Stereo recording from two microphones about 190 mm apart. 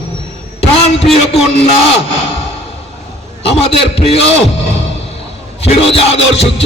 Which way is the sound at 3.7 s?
30° left (ahead or behind).